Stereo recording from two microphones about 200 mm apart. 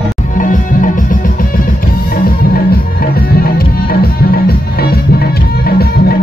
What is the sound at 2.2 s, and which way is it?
Music, 50° left (ahead or behind).